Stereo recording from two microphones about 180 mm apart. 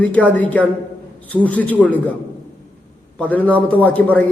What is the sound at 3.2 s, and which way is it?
A man's voice, 10° left (ahead or behind).